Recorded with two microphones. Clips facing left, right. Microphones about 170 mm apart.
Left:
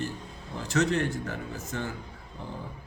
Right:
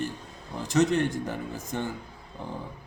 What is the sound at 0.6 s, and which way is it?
Speech, 15° right (ahead or behind).